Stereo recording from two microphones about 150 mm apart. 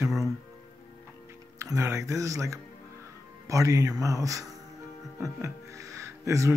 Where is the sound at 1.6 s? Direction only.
20° right (ahead or behind).